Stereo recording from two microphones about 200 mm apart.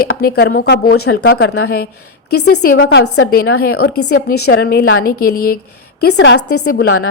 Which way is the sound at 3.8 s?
50° left (ahead or behind).